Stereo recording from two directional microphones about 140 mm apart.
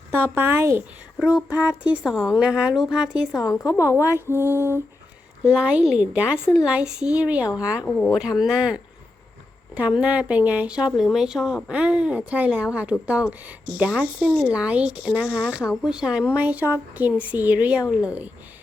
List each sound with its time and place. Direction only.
0.1 s speech: 15° right (ahead or behind)
1.2 s speech: 10° right (ahead or behind)
3.4 s a woman's voice: 25° left (ahead or behind)
5.4 s speech: 5° right (ahead or behind)
7.9 s speech: 5° left (ahead or behind)
8.4 s speech: 5° right (ahead or behind)
10.0 s speech: 10° right (ahead or behind)